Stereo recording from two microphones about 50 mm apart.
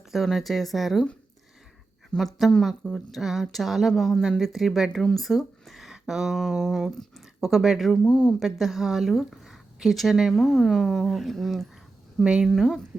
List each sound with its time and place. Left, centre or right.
0.3 s speech: centre
2.1 s speech: centre
4.9 s speech: centre
5.1 s speech: centre
5.6 s a sound: centre
7.4 s speech: centre
8.0 s speech: left
8.4 s speech: centre
12.2 s a woman's voice: centre
12.5 s speech: centre